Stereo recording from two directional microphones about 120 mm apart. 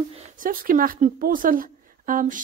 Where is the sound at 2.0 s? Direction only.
90° right.